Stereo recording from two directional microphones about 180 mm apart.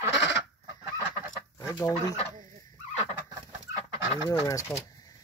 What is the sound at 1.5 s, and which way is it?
Chicken, 15° left (ahead or behind).